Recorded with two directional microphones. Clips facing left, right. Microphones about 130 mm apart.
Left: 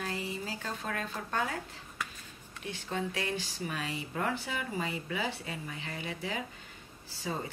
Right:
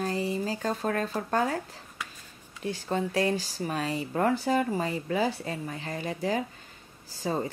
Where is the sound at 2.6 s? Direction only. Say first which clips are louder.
Right 6 dB; 40° right (ahead or behind).